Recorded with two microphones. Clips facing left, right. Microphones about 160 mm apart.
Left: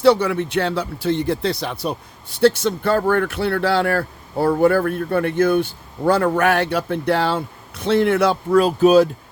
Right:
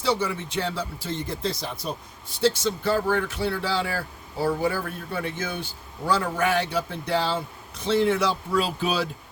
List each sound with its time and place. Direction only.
0.0 s speech: 65° left (ahead or behind); by 9.0 s 45° left (ahead or behind)